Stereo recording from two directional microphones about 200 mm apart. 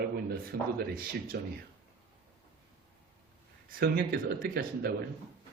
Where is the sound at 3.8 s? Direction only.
50° right (ahead or behind).